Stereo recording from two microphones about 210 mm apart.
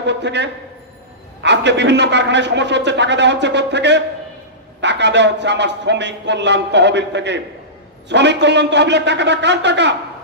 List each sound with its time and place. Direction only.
0.0 s a man's voice: 55° right (ahead or behind)